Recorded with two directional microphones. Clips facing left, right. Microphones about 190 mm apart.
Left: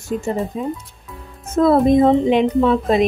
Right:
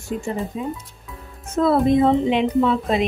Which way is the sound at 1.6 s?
45° left (ahead or behind).